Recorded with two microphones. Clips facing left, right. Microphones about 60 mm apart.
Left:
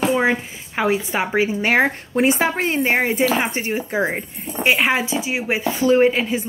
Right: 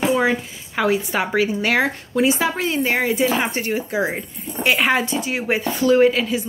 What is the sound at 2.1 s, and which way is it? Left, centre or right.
Speech, left.